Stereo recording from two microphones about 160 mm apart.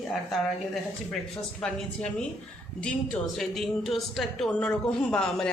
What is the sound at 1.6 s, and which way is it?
Speech, 5° left (ahead or behind).